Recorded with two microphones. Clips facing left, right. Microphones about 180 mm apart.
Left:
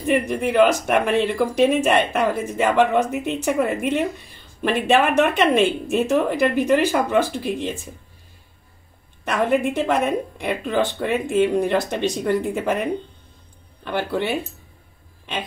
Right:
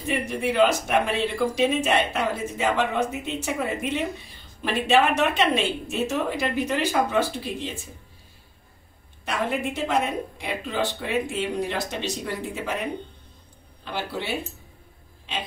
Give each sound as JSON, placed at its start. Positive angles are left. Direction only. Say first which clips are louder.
{"t": 0.0, "sound": "speech", "louder": "left 6 dB", "side_deg": 55}
{"t": 9.2, "sound": "speech", "louder": "left 7 dB", "side_deg": 55}
{"t": 13.8, "sound": "speech", "louder": "left 7 dB", "side_deg": 55}